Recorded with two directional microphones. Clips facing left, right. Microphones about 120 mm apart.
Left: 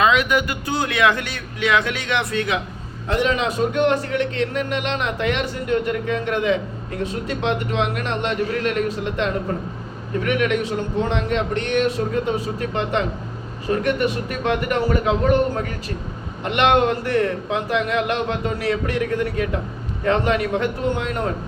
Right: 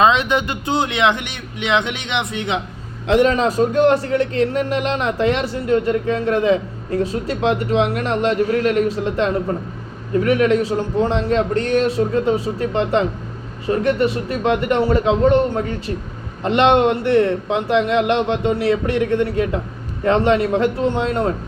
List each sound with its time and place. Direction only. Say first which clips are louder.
0.0 s a man's voice: right 2 dB; 25° right (ahead or behind)
3.2 s a man's voice: right 4 dB; 40° right (ahead or behind)